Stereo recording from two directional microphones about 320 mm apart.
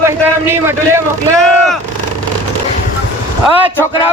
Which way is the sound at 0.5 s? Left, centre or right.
Centre.